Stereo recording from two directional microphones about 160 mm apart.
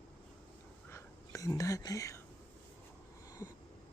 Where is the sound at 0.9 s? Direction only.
20° left (ahead or behind).